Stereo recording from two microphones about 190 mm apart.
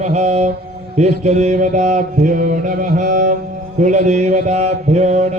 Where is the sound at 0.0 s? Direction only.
35° right (ahead or behind).